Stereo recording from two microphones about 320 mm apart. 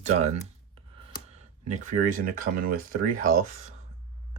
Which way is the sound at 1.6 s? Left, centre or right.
Right.